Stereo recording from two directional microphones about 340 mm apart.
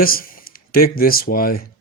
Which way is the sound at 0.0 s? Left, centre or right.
Left.